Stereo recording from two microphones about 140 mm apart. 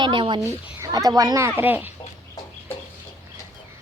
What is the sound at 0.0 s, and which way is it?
Speech, 35° right (ahead or behind).